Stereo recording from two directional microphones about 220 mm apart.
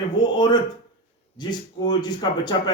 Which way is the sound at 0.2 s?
20° left (ahead or behind).